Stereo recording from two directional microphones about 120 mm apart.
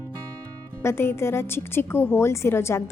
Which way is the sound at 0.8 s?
20° left (ahead or behind).